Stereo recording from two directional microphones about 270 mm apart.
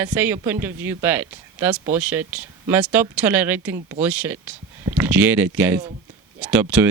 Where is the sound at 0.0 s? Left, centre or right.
Centre.